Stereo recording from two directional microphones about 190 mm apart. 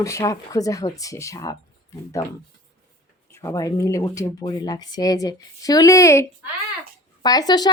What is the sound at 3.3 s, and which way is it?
A woman's voice, 15° left (ahead or behind).